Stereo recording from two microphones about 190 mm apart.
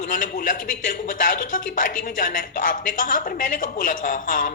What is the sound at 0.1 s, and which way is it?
A man's voice, 45° left (ahead or behind).